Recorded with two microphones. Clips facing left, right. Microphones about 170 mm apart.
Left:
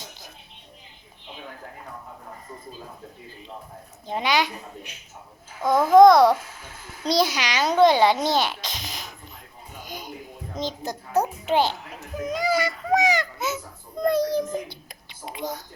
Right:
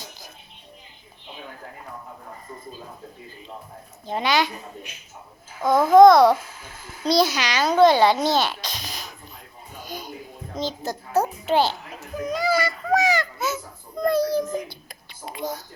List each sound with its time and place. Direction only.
4.1 s a child's voice: 15° left (ahead or behind)
5.6 s a child's voice: 15° left (ahead or behind)
9.7 s a sound: 20° left (ahead or behind)
10.6 s a child's voice: 15° left (ahead or behind)